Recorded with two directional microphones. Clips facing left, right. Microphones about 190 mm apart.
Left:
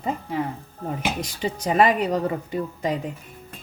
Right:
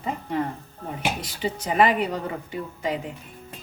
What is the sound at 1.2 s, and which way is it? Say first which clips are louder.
A woman's voice: left 2 dB; 40° left (ahead or behind).